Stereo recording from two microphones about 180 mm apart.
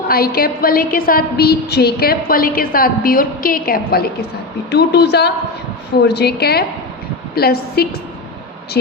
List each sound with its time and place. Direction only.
0.1 s a woman's voice: 55° left (ahead or behind)
4.7 s a woman's voice: 65° left (ahead or behind)